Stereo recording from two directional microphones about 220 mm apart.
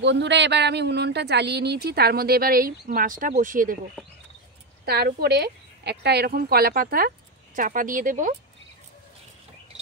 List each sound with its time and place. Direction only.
0.0 s speech: 55° right (ahead or behind); by 3.7 s 35° right (ahead or behind)
4.8 s speech: 45° right (ahead or behind)